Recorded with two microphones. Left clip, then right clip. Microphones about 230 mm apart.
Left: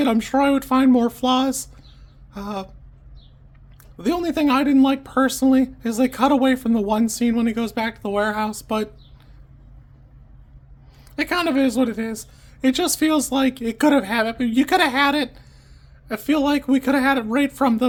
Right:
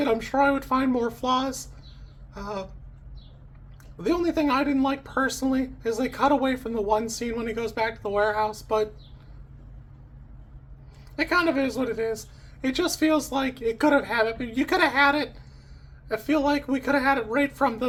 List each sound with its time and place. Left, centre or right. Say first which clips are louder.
0.0 s speech: left 3 dB; left
3.9 s speech: left 2 dB; left
11.1 s speech: left 2 dB; left